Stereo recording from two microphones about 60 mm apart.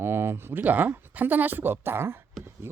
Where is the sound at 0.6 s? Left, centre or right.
Right.